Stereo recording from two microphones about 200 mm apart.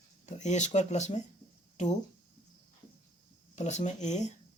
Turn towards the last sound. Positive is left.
turn(degrees=35)  # may be behind; listen again after turning